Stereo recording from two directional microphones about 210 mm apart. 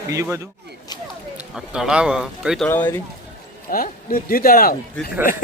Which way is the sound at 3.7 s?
40° left (ahead or behind).